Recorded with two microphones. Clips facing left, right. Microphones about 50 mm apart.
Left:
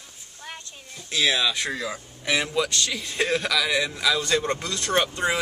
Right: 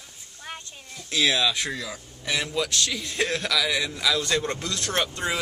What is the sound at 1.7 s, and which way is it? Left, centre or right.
Speech, centre.